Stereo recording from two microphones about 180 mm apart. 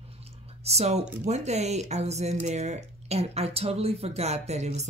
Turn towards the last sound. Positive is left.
turn(degrees=-40)  # may be behind; listen again after turning